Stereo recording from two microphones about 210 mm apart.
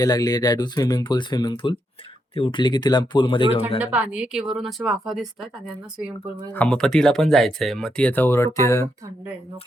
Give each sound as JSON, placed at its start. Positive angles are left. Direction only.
{"t": 0.0, "sound": "speech", "side_deg": 15}
{"t": 3.8, "sound": "speech", "side_deg": -5}